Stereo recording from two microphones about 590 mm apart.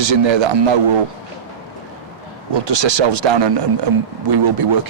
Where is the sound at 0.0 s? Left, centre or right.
Right.